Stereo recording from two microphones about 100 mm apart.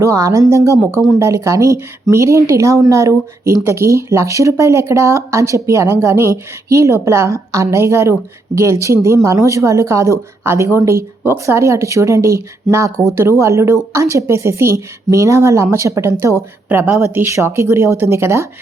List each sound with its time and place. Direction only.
0.0 s a woman's voice: 30° right (ahead or behind)